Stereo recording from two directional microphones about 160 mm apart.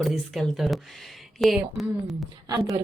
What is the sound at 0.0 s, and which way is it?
Speech, centre (ahead or behind).